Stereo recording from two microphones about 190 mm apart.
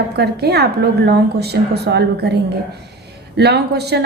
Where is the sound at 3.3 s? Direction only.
60° right (ahead or behind).